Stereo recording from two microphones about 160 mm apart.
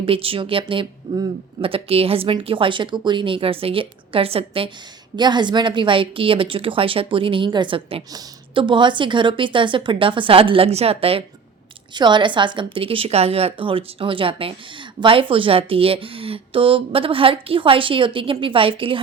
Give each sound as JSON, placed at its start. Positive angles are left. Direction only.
{"t": 0.0, "sound": "a woman's voice", "side_deg": -35}